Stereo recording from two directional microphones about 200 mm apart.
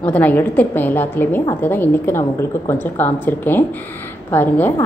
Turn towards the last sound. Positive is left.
turn(degrees=10)  # may be behind; listen again after turning